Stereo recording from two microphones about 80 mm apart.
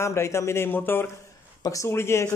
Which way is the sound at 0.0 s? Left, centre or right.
Left.